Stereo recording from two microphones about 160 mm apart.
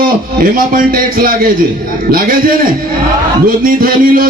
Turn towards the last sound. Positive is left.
turn(degrees=-60)  # may be behind; listen again after turning